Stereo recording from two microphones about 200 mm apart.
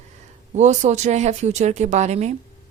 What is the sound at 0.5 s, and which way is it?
Speech, 35° right (ahead or behind).